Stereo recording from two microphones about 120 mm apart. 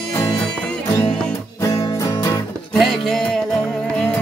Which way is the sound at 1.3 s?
30° left (ahead or behind).